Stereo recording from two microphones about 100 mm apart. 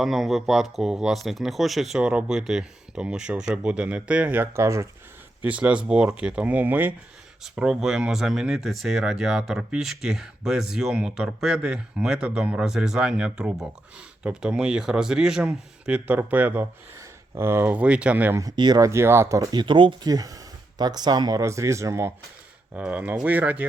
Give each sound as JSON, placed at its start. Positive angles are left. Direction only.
{"t": 0.0, "sound": "speech", "side_deg": 0}
{"t": 5.4, "sound": "speech", "side_deg": -15}
{"t": 7.4, "sound": "speech", "side_deg": -5}
{"t": 18.5, "sound": "speech", "side_deg": -45}
{"t": 18.8, "sound": "speech", "side_deg": -30}
{"t": 22.7, "sound": "speech", "side_deg": -15}